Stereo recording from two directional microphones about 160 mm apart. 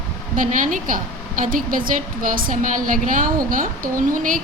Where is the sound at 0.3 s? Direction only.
55° right (ahead or behind).